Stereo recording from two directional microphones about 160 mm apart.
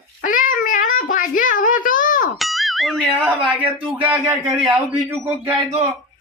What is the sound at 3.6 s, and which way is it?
A man's voice, 10° right (ahead or behind).